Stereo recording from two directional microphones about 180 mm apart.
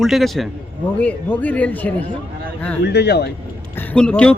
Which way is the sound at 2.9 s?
65° left (ahead or behind).